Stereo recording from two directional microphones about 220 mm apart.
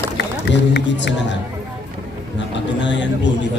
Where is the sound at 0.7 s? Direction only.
55° left (ahead or behind).